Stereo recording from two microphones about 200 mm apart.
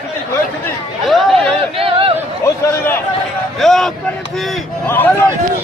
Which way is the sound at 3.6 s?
Centre (ahead or behind).